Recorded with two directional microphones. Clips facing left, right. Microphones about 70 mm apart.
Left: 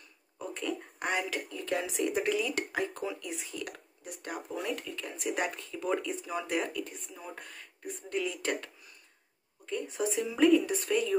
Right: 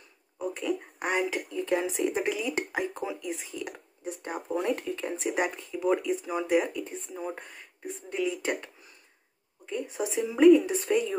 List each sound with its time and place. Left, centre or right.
0.4 s a sound: centre
2.0 s speech: centre
2.4 s speech: right
4.6 s speech: right
5.4 s speech: centre
8.1 s speech: centre
9.7 s speech: centre